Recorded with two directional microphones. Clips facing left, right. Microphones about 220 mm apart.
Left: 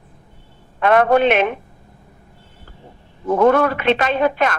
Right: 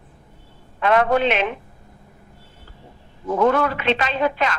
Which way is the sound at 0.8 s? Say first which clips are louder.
Left 4 dB; 55° left (ahead or behind).